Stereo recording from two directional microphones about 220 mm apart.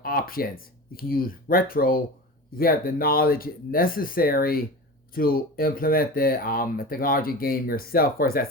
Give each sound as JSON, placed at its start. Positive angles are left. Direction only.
{"t": 0.0, "sound": "speech", "side_deg": 40}